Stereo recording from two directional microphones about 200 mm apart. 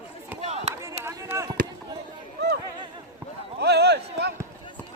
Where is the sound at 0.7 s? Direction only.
15° right (ahead or behind).